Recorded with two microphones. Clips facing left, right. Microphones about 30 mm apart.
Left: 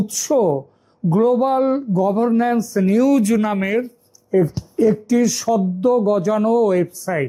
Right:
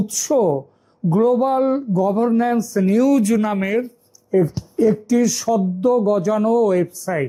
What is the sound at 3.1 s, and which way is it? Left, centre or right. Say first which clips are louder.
Speech: even; left.